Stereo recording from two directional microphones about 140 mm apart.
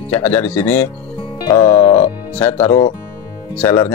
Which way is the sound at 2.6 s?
35° left (ahead or behind).